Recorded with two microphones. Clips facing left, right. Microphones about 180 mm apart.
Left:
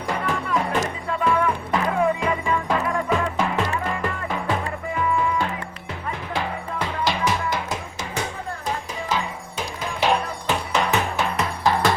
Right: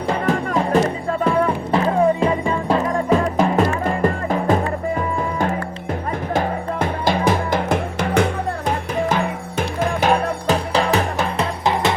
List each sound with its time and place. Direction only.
0.1 s music: 40° right (ahead or behind)
10.4 s music: 35° right (ahead or behind)
11.6 s music: 20° right (ahead or behind)